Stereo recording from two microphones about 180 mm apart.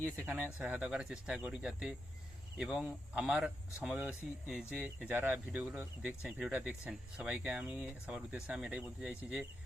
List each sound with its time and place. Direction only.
0.0 s speech: 15° right (ahead or behind)